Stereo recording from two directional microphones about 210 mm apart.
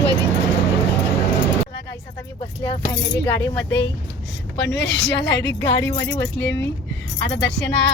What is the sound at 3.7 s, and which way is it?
A woman's voice, 55° left (ahead or behind).